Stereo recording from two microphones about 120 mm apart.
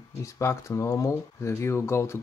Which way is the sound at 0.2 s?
25° left (ahead or behind).